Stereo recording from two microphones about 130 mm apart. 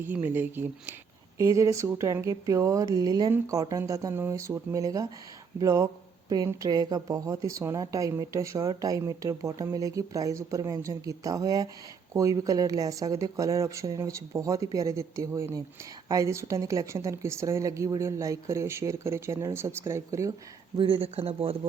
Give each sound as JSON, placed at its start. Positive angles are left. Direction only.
{"t": 0.3, "sound": "a woman's voice", "side_deg": -15}
{"t": 20.7, "sound": "speech", "side_deg": -40}